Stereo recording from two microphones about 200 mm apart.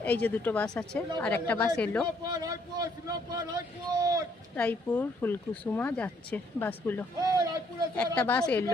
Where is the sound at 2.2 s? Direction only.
20° right (ahead or behind).